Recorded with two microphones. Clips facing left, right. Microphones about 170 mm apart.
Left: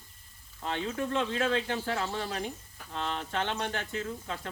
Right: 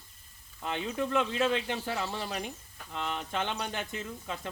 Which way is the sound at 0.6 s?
15° right (ahead or behind).